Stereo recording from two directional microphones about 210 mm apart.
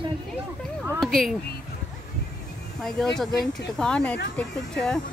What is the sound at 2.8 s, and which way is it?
A woman's voice, centre (ahead or behind).